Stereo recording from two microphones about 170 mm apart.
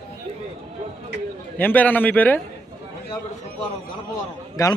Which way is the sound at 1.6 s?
10° left (ahead or behind).